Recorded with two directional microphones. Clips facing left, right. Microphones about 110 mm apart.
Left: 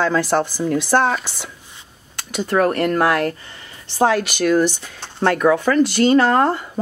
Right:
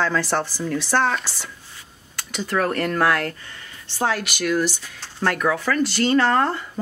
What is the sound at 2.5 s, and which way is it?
Speech, 25° left (ahead or behind).